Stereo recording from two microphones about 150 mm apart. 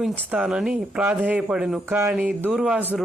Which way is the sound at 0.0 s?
5° right (ahead or behind).